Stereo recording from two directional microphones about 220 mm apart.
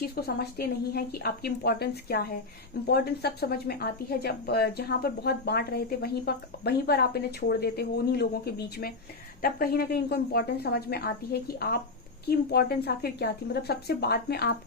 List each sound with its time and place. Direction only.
0.2 s speech: 45° left (ahead or behind)